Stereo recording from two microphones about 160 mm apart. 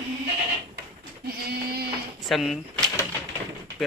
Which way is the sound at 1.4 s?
90° right.